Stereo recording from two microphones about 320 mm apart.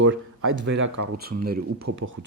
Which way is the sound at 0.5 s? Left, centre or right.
Right.